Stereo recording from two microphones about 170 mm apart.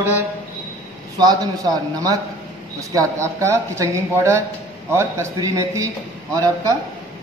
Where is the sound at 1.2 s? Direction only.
20° right (ahead or behind).